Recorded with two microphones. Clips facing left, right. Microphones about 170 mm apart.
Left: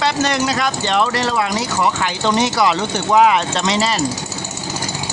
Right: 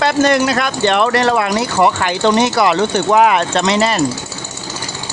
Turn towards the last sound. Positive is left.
turn(degrees=-60)  # may be behind; listen again after turning